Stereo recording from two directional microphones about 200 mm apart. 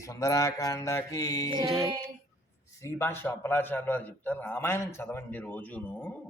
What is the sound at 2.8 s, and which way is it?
A man's voice, 10° left (ahead or behind).